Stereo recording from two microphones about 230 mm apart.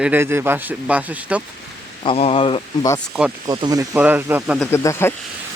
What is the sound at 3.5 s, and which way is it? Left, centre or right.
Speech, centre.